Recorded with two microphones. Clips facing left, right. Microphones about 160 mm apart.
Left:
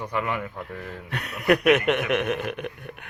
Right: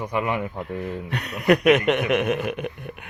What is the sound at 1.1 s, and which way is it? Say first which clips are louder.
Speech: right 2 dB; centre (ahead or behind).